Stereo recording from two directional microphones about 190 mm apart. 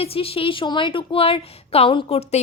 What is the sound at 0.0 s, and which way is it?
A woman's voice, 30° left (ahead or behind).